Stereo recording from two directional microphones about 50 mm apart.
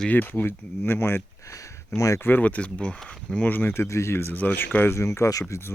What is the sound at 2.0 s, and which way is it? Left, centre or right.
Speech, left.